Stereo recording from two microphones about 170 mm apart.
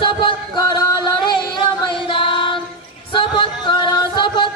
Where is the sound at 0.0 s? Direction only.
30° left (ahead or behind).